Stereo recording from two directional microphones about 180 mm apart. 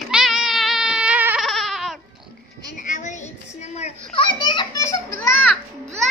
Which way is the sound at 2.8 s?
45° left (ahead or behind).